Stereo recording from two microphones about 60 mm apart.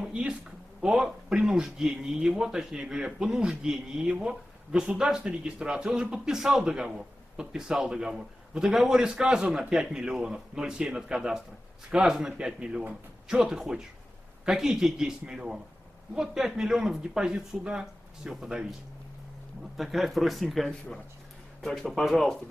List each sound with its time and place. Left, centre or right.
0.0 s speech: centre
19.8 s speech: centre